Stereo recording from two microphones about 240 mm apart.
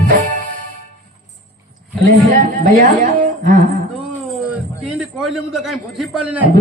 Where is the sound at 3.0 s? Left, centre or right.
Right.